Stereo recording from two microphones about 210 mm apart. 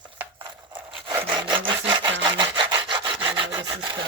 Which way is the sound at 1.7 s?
20° right (ahead or behind).